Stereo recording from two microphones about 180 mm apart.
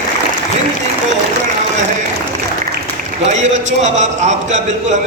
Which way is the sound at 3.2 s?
40° right (ahead or behind).